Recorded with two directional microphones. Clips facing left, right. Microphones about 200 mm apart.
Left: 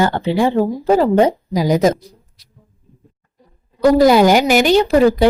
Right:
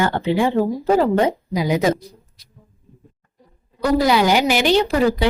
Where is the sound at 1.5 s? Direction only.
40° left (ahead or behind).